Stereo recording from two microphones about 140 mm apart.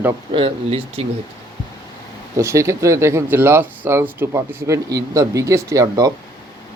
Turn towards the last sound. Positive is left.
turn(degrees=-25)  # may be behind; listen again after turning